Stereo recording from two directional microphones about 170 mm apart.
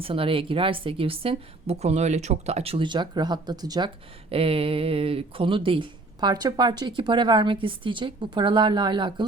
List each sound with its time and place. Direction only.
0.0 s a woman's voice: 35° right (ahead or behind)